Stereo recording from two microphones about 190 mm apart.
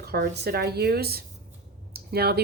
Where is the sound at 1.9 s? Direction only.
55° right (ahead or behind).